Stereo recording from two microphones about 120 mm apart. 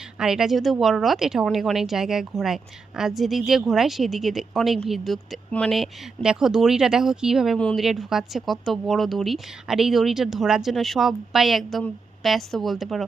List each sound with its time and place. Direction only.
0.2 s a woman's voice: 5° right (ahead or behind)
5.5 s speech: 10° left (ahead or behind)
5.7 s a woman's voice: 5° right (ahead or behind)